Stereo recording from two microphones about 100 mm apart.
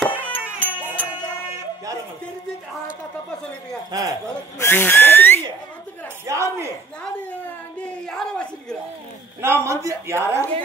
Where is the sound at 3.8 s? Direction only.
40° right (ahead or behind).